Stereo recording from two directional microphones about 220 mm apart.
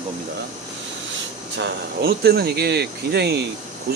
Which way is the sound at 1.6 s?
50° right (ahead or behind).